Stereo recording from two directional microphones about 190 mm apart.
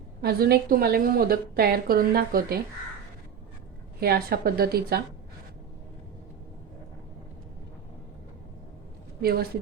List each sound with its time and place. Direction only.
0.2 s a woman's voice: 55° right (ahead or behind)
4.0 s a woman's voice: 55° right (ahead or behind)